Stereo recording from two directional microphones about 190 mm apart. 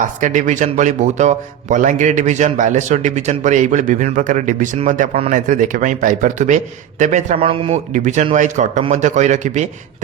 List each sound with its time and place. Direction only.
0.0 s a man's voice: 40° right (ahead or behind)
7.9 s a man's voice: 40° right (ahead or behind)